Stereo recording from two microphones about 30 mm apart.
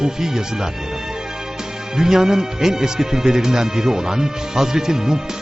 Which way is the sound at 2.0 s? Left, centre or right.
Centre.